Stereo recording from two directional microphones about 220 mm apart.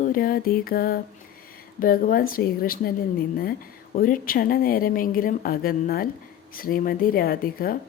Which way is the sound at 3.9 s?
40° left (ahead or behind).